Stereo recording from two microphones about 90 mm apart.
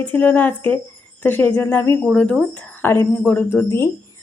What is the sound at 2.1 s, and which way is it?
A woman's voice, 15° left (ahead or behind).